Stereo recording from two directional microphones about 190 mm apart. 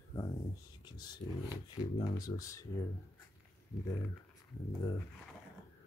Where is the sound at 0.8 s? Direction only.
20° left (ahead or behind).